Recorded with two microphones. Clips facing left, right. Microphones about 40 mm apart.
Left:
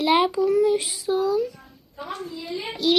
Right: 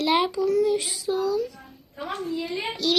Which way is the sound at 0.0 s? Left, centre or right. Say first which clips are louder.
Left 3 dB; centre.